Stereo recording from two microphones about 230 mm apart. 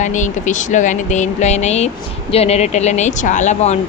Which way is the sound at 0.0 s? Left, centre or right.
Left.